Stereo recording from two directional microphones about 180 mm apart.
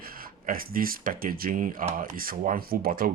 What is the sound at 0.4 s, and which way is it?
Speech, 50° right (ahead or behind).